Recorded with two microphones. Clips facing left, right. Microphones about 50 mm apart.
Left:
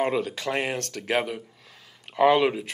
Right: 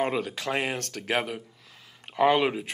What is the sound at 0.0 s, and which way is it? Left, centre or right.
Speech, centre.